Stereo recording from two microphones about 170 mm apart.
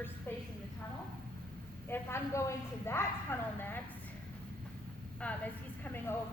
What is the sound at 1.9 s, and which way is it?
Speech, 15° left (ahead or behind).